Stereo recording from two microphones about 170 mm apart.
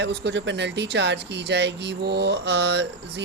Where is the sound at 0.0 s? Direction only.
80° right.